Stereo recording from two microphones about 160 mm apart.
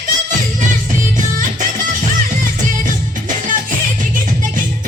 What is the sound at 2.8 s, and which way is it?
Music, 55° right (ahead or behind).